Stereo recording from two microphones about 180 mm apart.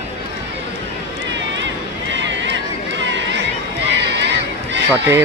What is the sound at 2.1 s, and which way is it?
Run, 85° right.